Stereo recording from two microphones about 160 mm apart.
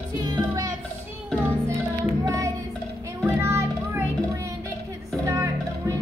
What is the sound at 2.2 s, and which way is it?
Music, 20° right (ahead or behind).